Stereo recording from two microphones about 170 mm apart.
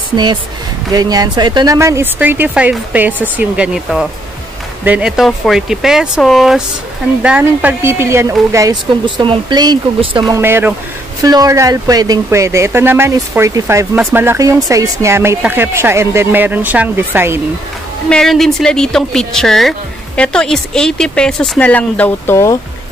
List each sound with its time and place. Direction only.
0.1 s speech: 25° right (ahead or behind)
10.3 s speech: 15° right (ahead or behind)
18.1 s speech: centre (ahead or behind)